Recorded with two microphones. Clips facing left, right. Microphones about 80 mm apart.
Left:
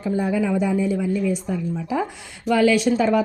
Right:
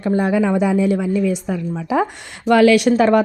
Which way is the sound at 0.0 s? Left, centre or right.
Right.